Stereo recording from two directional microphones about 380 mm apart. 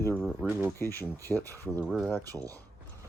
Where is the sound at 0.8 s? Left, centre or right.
Centre.